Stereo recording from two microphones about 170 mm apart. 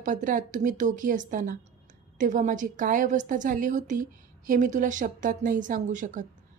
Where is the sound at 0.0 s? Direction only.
50° right (ahead or behind).